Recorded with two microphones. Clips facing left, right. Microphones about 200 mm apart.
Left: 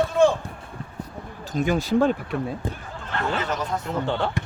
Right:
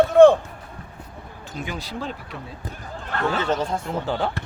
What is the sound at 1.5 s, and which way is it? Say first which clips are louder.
Speech: left 10 dB; 45° left (ahead or behind).